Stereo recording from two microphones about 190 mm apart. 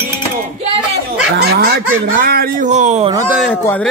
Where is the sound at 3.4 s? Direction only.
10° left (ahead or behind).